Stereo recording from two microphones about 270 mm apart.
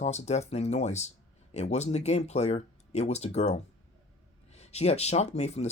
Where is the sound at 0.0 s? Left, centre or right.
Left.